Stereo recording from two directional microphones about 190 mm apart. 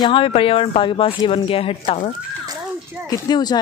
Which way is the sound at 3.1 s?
20° left (ahead or behind).